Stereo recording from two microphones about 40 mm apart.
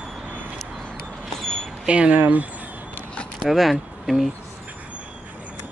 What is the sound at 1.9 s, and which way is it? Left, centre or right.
Speech, right.